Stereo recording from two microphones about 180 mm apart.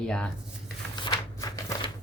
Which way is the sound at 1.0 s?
25° left (ahead or behind).